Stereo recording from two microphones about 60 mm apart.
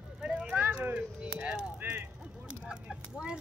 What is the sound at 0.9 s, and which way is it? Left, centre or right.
Speech, right.